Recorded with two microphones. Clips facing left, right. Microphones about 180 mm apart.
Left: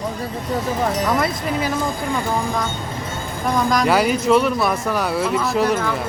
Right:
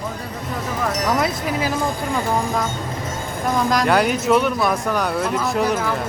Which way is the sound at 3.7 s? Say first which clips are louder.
Left 1 dB; centre (ahead or behind).